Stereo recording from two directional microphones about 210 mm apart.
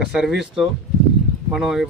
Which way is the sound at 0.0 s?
Centre (ahead or behind).